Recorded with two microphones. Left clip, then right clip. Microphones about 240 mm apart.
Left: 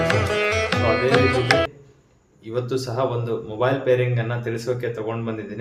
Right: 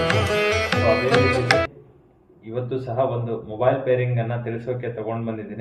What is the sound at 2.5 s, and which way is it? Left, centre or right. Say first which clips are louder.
Speech: left 1 dB; centre.